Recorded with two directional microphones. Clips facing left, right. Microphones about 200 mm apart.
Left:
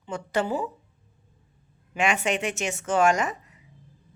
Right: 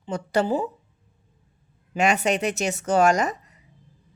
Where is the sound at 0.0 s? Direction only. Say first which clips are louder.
Right 4 dB; 35° right (ahead or behind).